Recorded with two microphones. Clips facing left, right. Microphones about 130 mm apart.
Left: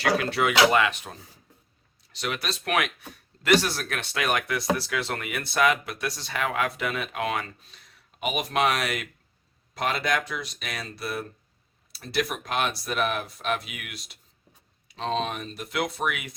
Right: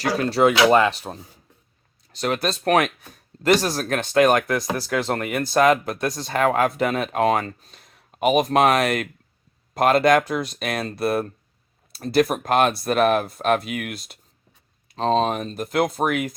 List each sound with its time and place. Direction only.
0.0 s speech: 35° right (ahead or behind)
2.1 s speech: 40° right (ahead or behind)